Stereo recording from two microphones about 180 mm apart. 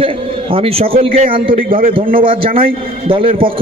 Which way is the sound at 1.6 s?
50° right (ahead or behind).